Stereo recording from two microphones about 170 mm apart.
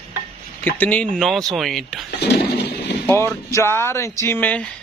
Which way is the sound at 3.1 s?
15° left (ahead or behind).